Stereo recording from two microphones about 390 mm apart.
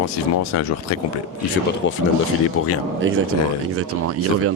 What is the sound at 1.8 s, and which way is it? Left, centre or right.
Speech, left.